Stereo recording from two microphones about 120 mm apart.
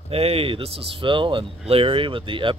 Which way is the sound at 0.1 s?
55° right (ahead or behind).